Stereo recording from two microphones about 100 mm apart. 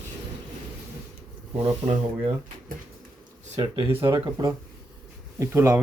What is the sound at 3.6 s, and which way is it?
Speech, 60° right (ahead or behind).